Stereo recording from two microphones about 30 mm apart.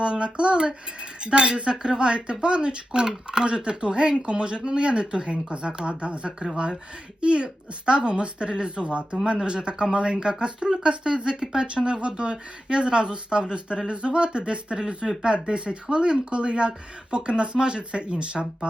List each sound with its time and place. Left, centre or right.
0.0 s speech: right
14.8 s speech: right